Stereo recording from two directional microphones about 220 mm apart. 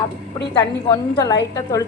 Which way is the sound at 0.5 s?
20° left (ahead or behind).